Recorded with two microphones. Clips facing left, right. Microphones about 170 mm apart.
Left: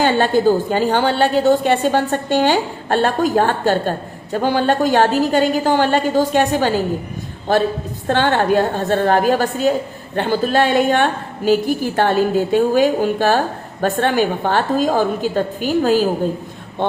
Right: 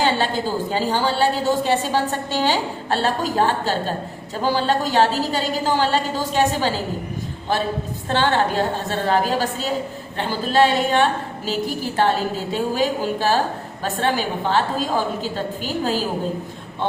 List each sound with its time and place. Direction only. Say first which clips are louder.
0.0 s a woman's voice: left 7 dB; 50° left (ahead or behind)
8.0 s a woman's voice: left 4 dB; 50° left (ahead or behind)
12.5 s a woman's voice: left 6 dB; 50° left (ahead or behind)